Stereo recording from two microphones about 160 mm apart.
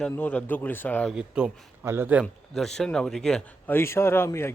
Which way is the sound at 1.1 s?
10° right (ahead or behind).